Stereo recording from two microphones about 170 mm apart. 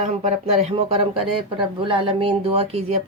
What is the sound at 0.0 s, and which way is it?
A woman's voice, 45° right (ahead or behind).